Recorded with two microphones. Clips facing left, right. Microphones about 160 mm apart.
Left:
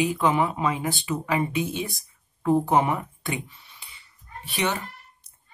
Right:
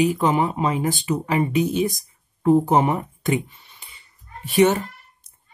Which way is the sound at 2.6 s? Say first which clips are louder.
Right 3 dB; 40° right (ahead or behind).